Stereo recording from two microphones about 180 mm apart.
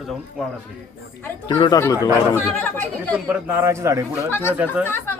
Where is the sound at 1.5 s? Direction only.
25° left (ahead or behind); by 3.2 s 10° left (ahead or behind).